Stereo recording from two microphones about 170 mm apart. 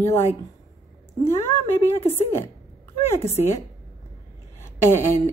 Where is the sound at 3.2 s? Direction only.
40° left (ahead or behind).